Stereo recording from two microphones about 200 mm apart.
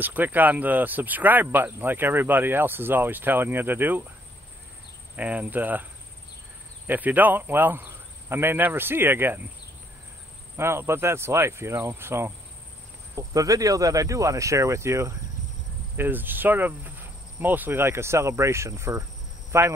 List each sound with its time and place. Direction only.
0.0 s speech: 10° right (ahead or behind)
5.1 s speech: 5° right (ahead or behind)
6.9 s speech: 10° right (ahead or behind)
10.6 s speech: 15° right (ahead or behind)